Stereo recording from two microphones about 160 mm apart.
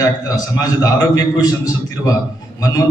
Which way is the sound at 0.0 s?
20° left (ahead or behind).